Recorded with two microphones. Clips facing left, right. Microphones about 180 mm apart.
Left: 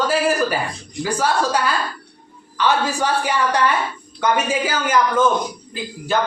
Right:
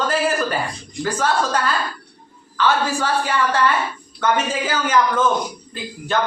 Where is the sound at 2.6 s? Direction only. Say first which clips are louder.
Even; 15° left (ahead or behind).